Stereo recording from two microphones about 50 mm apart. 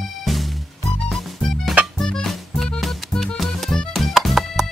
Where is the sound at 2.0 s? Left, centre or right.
Centre.